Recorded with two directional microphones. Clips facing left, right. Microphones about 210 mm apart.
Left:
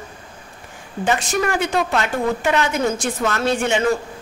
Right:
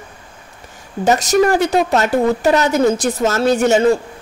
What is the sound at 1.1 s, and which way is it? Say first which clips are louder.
A woman's voice: right 7 dB; 40° right (ahead or behind).